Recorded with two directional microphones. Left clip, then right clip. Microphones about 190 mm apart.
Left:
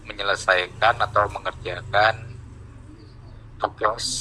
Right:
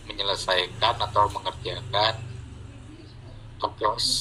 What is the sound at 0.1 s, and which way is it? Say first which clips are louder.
A man's voice: left 4 dB; 25° right (ahead or behind).